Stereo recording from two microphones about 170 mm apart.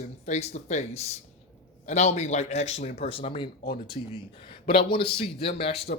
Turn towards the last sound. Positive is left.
turn(degrees=35)  # may be behind; listen again after turning